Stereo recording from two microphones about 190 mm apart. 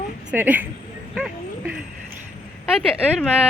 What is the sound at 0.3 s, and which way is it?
Speech, 10° right (ahead or behind).